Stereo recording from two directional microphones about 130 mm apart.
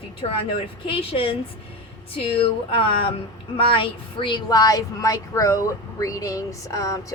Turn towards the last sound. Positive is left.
turn(degrees=25)  # may be behind; listen again after turning